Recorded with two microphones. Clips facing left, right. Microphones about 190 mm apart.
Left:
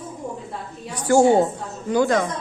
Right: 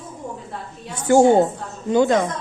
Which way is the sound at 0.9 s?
20° right (ahead or behind).